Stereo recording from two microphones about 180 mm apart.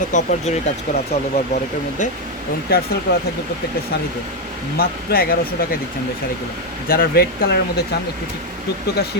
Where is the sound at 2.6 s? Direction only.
60° left (ahead or behind).